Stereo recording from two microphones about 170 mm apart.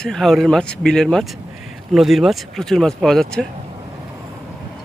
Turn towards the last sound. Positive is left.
turn(degrees=0)  # may be behind; listen again after turning